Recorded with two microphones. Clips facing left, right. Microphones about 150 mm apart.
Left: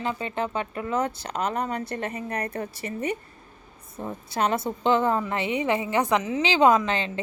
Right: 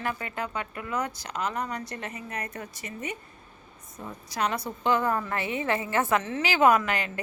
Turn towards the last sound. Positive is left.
turn(degrees=25)  # may be behind; listen again after turning